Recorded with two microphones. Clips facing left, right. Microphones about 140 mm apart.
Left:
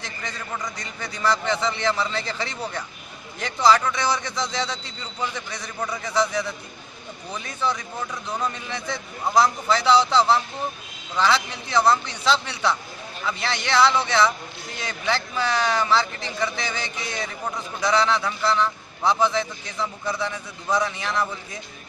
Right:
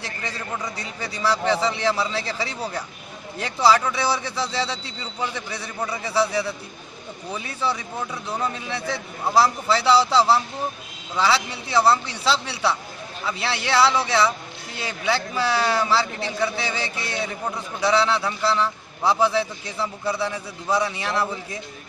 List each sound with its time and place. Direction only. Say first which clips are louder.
0.2 s a man's voice: right 1 dB; 10° right (ahead or behind)